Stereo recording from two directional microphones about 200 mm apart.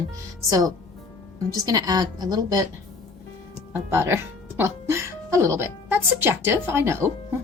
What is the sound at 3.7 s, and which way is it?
Speech, 15° right (ahead or behind).